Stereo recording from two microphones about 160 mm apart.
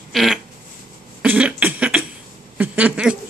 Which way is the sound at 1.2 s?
5° right (ahead or behind).